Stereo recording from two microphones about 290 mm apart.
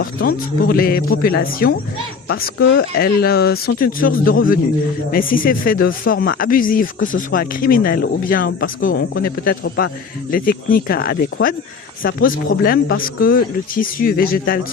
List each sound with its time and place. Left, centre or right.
0.0 s speech: left